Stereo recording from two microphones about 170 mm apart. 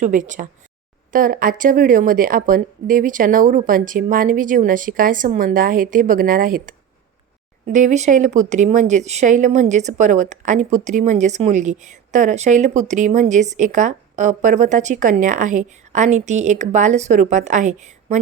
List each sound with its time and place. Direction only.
0.0 s a woman's voice: 45° right (ahead or behind)
7.7 s a woman's voice: 45° right (ahead or behind)